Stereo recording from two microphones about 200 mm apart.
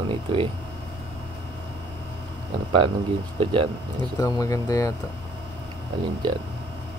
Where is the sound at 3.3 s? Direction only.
30° right (ahead or behind).